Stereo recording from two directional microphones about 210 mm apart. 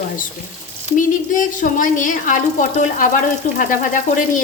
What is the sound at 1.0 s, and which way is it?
A woman's voice, 40° left (ahead or behind).